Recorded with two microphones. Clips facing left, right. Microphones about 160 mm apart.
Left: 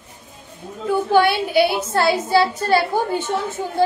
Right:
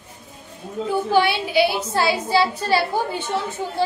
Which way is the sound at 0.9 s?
55° left (ahead or behind).